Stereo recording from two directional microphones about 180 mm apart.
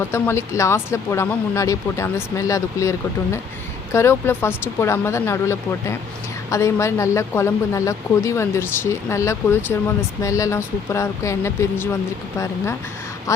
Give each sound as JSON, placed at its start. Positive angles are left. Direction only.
{"t": 0.1, "sound": "speech", "side_deg": 15}
{"t": 3.9, "sound": "speech", "side_deg": 15}